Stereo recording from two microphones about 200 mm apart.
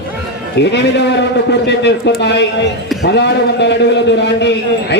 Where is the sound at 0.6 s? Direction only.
60° left (ahead or behind).